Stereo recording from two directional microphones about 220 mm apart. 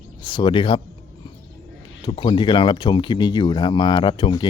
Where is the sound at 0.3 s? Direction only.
20° left (ahead or behind).